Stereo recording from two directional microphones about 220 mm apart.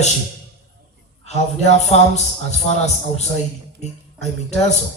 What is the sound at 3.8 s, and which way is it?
Speech, 30° left (ahead or behind).